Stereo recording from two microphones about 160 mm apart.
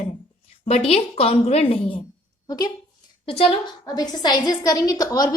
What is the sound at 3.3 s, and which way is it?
Speech, 35° left (ahead or behind).